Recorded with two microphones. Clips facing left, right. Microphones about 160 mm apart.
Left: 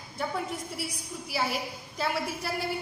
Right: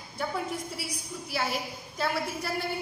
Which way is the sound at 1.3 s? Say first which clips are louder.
Left 1 dB; 5° left (ahead or behind).